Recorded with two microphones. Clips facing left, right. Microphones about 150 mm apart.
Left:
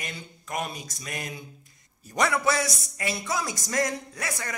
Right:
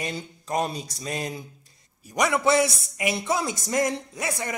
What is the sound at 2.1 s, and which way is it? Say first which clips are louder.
A man's voice: right 4 dB; 15° right (ahead or behind).